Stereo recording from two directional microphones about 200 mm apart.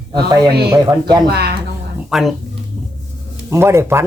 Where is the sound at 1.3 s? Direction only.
50° right (ahead or behind).